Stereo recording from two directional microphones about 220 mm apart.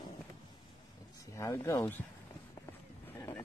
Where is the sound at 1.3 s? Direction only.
15° left (ahead or behind).